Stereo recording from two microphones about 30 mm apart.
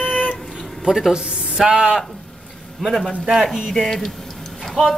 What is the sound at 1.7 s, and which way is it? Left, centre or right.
Speech, right.